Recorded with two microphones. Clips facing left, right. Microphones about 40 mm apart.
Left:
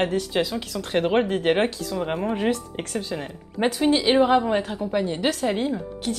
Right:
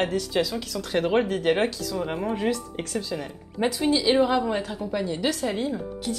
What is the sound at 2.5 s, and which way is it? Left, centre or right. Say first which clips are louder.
A woman's voice: left 1 dB; left.